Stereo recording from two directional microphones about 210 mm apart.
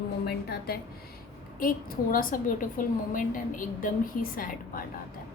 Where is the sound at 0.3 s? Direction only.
50° left (ahead or behind).